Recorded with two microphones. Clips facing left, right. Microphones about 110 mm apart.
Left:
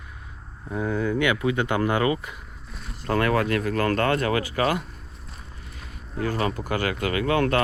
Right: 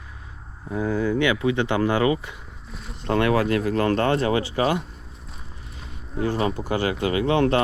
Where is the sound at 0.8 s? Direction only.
30° right (ahead or behind).